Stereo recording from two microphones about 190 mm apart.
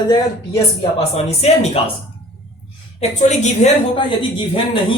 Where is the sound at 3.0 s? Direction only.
35° left (ahead or behind).